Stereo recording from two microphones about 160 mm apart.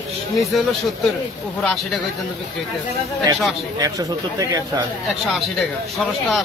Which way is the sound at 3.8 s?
20° right (ahead or behind).